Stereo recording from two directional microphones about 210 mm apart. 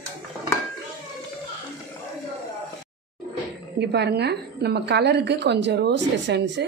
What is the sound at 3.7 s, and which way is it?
A woman's voice, 50° right (ahead or behind).